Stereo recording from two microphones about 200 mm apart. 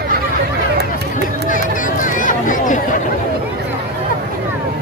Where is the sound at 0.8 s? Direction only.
55° right (ahead or behind).